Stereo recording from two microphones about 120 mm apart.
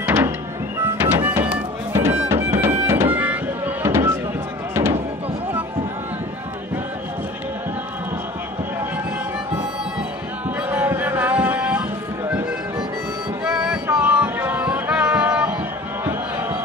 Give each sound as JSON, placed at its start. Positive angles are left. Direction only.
{"t": 0.0, "sound": "music", "side_deg": -15}
{"t": 10.7, "sound": "a sound", "side_deg": -15}
{"t": 12.3, "sound": "music", "side_deg": -10}
{"t": 13.8, "sound": "music", "side_deg": -20}
{"t": 16.1, "sound": "crowd", "side_deg": -20}